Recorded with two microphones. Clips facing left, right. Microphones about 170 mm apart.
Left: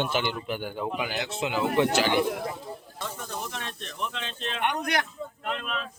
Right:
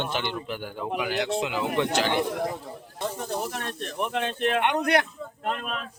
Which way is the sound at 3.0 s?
35° right (ahead or behind).